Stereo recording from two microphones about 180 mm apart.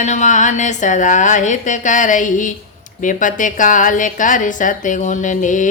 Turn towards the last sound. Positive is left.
turn(degrees=45)  # may be behind; listen again after turning